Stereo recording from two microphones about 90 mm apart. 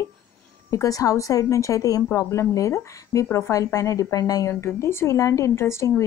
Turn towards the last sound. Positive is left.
turn(degrees=30)  # may be behind; listen again after turning